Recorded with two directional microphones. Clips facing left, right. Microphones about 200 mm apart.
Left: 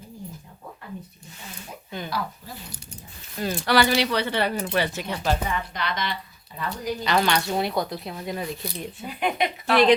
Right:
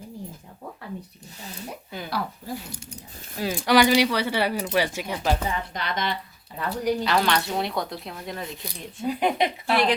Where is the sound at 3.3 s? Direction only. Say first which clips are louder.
Right 2 dB; 5° right (ahead or behind).